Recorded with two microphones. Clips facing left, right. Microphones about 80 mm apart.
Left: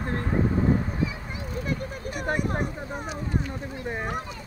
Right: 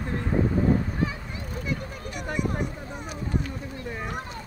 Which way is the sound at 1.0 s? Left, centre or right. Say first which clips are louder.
Right 1 dB; right.